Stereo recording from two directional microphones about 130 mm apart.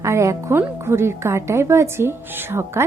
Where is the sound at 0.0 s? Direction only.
20° right (ahead or behind).